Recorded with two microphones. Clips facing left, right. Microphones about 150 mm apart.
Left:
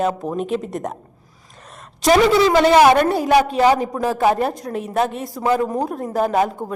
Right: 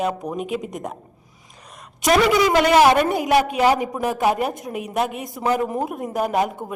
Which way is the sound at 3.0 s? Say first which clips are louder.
Left 3 dB; 15° right (ahead or behind).